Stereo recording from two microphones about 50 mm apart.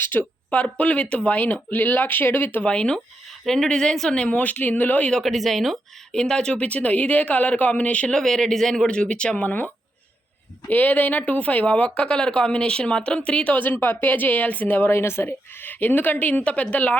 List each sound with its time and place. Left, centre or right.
0.0 s speech: left
0.5 s a woman's voice: left
2.6 s speech: centre
3.4 s speech: centre
4.1 s a woman's voice: left
5.2 s speech: centre
6.1 s speech: centre
8.1 s speech: centre
9.4 s a woman's voice: left
10.7 s a woman's voice: left
14.8 s a woman's voice: left